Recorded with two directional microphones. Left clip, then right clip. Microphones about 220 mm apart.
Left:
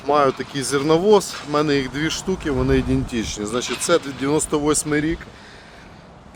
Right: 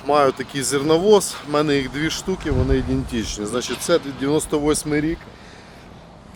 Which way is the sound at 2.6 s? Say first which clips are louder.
Left 3 dB; 20° left (ahead or behind).